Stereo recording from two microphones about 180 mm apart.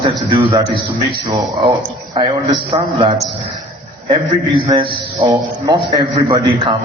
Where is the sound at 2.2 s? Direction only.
25° right (ahead or behind).